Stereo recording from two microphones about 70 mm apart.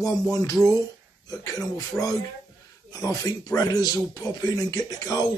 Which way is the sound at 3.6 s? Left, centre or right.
Left.